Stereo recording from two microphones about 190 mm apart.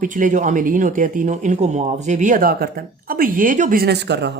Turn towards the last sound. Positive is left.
turn(degrees=-65)  # may be behind; listen again after turning